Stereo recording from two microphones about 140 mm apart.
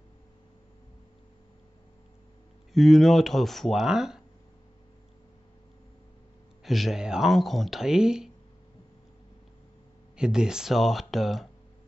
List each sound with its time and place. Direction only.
2.7 s speech: centre (ahead or behind)
6.6 s speech: centre (ahead or behind)
10.1 s speech: 5° right (ahead or behind)